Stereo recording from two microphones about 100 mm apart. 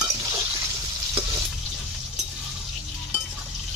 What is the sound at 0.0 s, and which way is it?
Stir, 30° right (ahead or behind).